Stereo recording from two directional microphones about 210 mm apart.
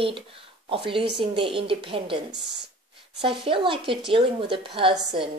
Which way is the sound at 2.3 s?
55° right (ahead or behind).